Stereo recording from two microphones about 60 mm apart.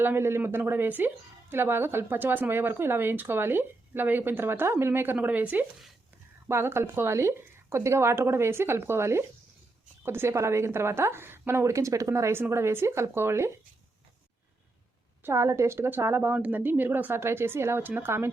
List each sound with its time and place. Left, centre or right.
0.0 s a woman's voice: right
5.2 s speech: right
6.5 s a woman's voice: right
15.2 s a woman's voice: right
16.3 s a woman's voice: right